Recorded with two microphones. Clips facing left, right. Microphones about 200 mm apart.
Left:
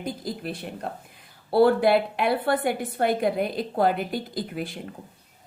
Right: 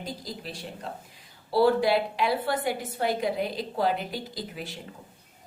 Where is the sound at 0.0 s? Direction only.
55° left (ahead or behind).